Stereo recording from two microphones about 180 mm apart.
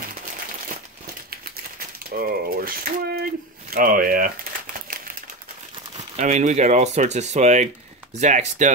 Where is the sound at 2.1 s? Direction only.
55° right (ahead or behind).